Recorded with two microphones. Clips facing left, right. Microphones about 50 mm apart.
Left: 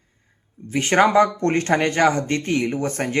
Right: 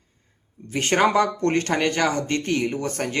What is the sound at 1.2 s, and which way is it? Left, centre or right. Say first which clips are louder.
Speech: left 3 dB; left.